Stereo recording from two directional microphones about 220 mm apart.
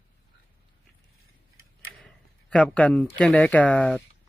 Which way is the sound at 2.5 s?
5° left (ahead or behind).